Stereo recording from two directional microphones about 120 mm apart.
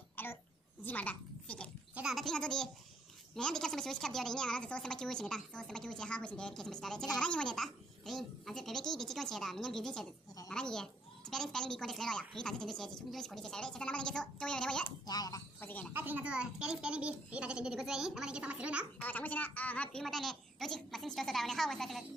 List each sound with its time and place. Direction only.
0.1 s a sound: 15° left (ahead or behind)
0.8 s a child's voice: 15° left (ahead or behind)
2.0 s a woman's voice: centre (ahead or behind)
15.0 s speech: 30° left (ahead or behind)
15.6 s a woman's voice: 15° left (ahead or behind)
15.9 s a child's voice: 15° right (ahead or behind)
19.0 s speech: 15° left (ahead or behind)